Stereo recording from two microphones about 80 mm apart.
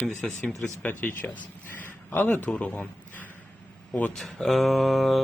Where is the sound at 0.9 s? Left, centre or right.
Left.